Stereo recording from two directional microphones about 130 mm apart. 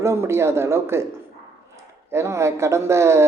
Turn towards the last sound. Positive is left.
turn(degrees=-20)  # may be behind; listen again after turning